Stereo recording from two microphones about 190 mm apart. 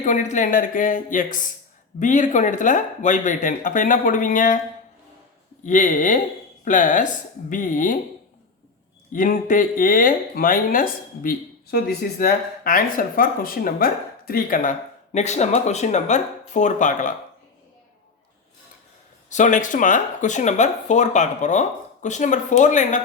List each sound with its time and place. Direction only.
0.0 s speech: 40° left (ahead or behind)
5.6 s speech: 40° left (ahead or behind)
9.1 s speech: 45° left (ahead or behind)
19.3 s speech: 40° left (ahead or behind)